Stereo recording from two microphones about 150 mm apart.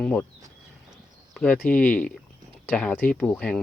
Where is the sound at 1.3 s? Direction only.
5° left (ahead or behind).